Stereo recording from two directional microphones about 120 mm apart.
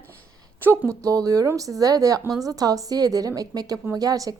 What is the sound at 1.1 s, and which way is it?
A woman's voice, 30° right (ahead or behind).